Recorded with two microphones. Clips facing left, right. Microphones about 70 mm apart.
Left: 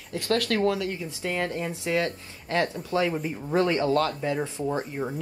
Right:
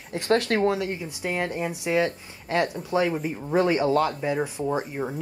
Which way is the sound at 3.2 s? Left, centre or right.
Centre.